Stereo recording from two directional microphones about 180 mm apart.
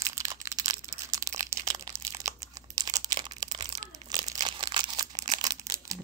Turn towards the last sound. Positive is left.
turn(degrees=-20)  # may be behind; listen again after turning